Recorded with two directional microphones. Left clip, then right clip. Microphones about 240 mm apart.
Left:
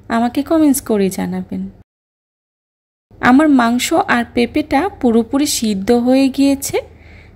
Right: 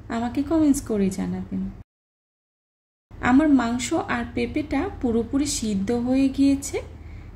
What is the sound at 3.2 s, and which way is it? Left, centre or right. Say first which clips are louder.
A woman's voice: left 8 dB; left.